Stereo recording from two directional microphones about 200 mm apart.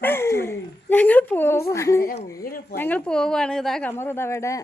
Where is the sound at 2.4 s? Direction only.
45° left (ahead or behind).